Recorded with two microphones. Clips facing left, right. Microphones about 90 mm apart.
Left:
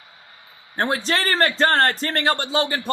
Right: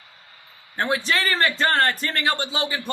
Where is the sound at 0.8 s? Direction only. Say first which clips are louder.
Left 1 dB; 35° left (ahead or behind).